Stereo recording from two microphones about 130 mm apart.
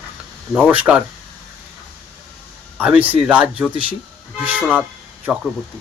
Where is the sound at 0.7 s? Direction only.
10° right (ahead or behind).